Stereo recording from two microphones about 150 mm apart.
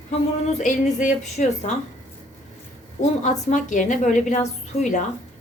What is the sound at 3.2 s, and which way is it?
A woman's voice, 55° left (ahead or behind).